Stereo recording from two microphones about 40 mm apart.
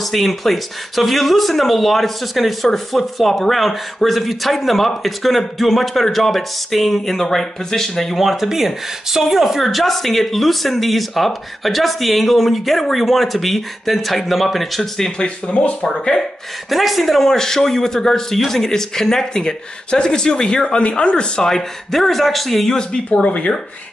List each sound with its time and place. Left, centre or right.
0.0 s speech: centre
15.1 s speech: left
15.9 s a man's voice: centre
22.7 s a man's voice: centre
23.2 s speech: left